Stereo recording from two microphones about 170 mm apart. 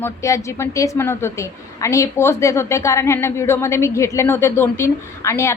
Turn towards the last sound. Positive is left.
turn(degrees=15)  # may be behind; listen again after turning